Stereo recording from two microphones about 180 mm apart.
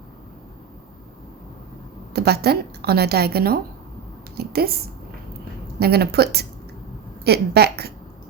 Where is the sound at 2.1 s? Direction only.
65° right (ahead or behind).